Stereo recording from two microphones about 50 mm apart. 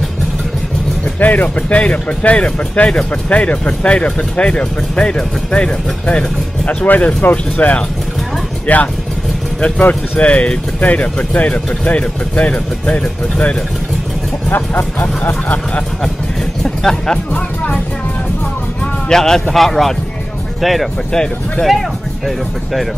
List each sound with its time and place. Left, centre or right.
1.2 s speech: left
14.5 s speech: left
16.6 s speech: centre
19.0 s speech: centre
21.1 s speech: centre